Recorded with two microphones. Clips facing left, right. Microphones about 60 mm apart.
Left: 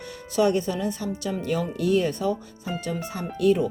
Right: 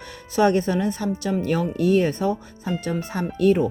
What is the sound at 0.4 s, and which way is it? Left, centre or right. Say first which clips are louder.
Speech: right 5 dB; right.